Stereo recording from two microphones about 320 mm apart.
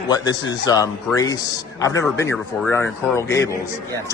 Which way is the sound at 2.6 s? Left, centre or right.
Centre.